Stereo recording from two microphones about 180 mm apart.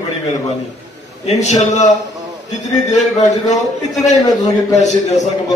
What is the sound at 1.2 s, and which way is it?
Speech, 40° left (ahead or behind).